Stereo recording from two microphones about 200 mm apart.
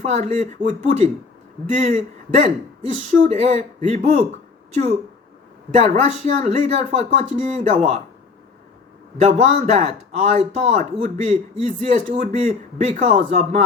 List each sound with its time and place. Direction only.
0.0 s a man's voice: 30° right (ahead or behind)
5.7 s a man's voice: 35° right (ahead or behind)
9.2 s a man's voice: 35° right (ahead or behind)